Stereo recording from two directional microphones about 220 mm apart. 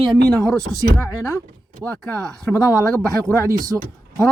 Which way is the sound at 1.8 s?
5° left (ahead or behind).